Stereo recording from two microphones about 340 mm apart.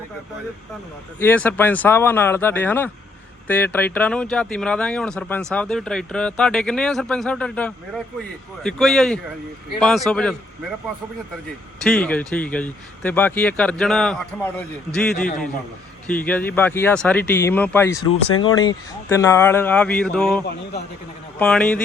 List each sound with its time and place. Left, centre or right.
1.2 s speech: centre
11.8 s speech: centre
16.0 s speech: centre